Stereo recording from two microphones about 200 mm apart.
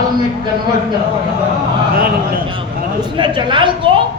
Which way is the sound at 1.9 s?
45° right (ahead or behind).